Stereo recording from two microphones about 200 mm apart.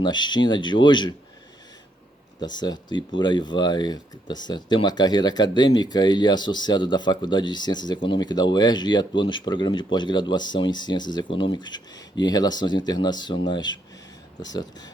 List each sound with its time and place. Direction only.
0.0 s speech: 20° left (ahead or behind)
2.4 s speech: 20° left (ahead or behind)